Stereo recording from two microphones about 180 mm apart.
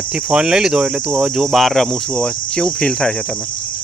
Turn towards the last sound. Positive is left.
turn(degrees=5)  # may be behind; listen again after turning